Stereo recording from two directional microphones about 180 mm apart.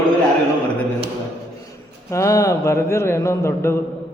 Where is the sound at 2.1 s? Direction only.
15° left (ahead or behind).